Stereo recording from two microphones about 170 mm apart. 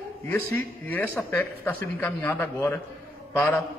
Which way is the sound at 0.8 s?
10° left (ahead or behind).